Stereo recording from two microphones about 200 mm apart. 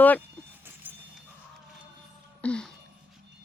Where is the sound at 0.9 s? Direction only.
10° right (ahead or behind).